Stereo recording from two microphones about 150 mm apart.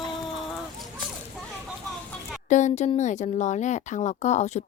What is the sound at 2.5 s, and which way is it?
Speech, 50° left (ahead or behind).